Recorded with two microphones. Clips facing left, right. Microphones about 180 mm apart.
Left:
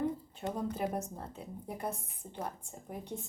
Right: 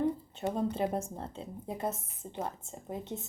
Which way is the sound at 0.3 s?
25° right (ahead or behind).